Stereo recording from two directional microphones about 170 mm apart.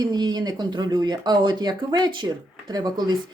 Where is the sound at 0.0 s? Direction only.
25° right (ahead or behind).